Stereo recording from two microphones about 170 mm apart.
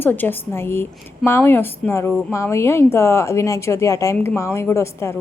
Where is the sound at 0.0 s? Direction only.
10° left (ahead or behind).